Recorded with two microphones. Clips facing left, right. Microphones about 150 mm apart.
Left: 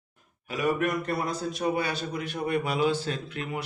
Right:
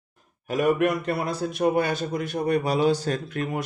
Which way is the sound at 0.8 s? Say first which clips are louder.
Right 4 dB; 70° right (ahead or behind).